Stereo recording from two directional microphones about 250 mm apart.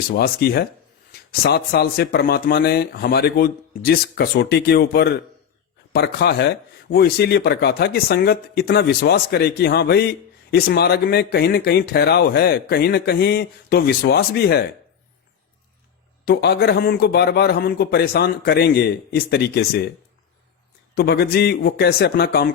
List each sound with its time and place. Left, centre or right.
0.1 s speech: left
16.2 s speech: left
20.9 s speech: left